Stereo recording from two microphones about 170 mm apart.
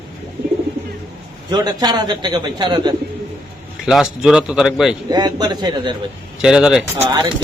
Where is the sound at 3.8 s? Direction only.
Centre (ahead or behind).